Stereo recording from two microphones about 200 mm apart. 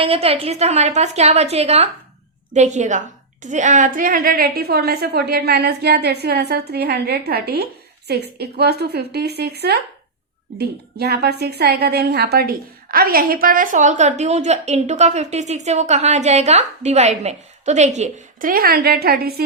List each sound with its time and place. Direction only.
0.0 s a woman's voice: 30° right (ahead or behind); by 19.5 s 50° right (ahead or behind)